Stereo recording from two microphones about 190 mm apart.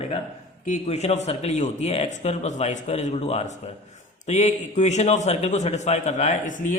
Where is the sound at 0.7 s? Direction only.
35° left (ahead or behind).